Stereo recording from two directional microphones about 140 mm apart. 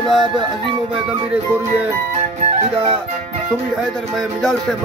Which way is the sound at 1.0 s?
10° right (ahead or behind).